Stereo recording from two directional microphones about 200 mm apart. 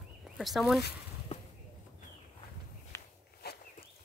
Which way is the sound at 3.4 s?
55° left (ahead or behind).